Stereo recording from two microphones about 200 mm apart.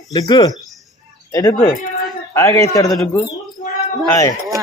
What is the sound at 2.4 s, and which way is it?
Speech, 15° left (ahead or behind).